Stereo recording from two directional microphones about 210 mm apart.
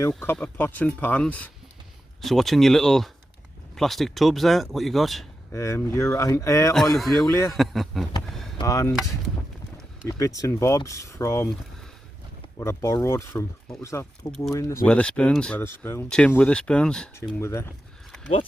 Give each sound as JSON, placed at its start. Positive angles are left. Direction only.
{"t": 0.1, "sound": "speech", "side_deg": 5}
{"t": 5.5, "sound": "speech", "side_deg": 15}
{"t": 6.9, "sound": "speech", "side_deg": 0}
{"t": 7.2, "sound": "speech", "side_deg": 15}
{"t": 7.5, "sound": "speech", "side_deg": 0}
{"t": 8.3, "sound": "vehicle", "side_deg": 0}
{"t": 8.5, "sound": "speech", "side_deg": 15}
{"t": 10.1, "sound": "speech", "side_deg": 15}
{"t": 12.5, "sound": "speech", "side_deg": 15}